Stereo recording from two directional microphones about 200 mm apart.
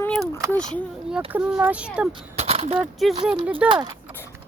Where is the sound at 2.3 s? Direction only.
30° right (ahead or behind).